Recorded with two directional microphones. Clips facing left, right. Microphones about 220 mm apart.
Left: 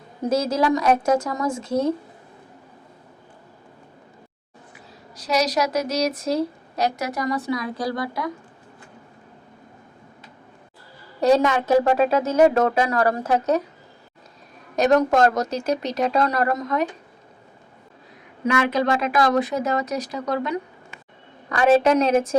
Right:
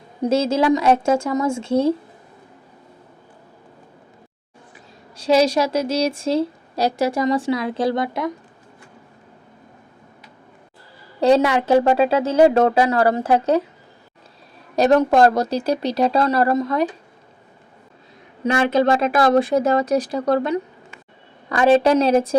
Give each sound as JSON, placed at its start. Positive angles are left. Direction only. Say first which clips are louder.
{"t": 0.3, "sound": "a woman's voice", "louder": "right 3 dB", "side_deg": -25}
{"t": 5.1, "sound": "a woman's voice", "louder": "right 6 dB", "side_deg": -30}
{"t": 11.2, "sound": "a woman's voice", "louder": "right 2 dB", "side_deg": -30}
{"t": 14.8, "sound": "speech", "louder": "right 3 dB", "side_deg": -30}
{"t": 18.4, "sound": "speech", "louder": "right 4 dB", "side_deg": -30}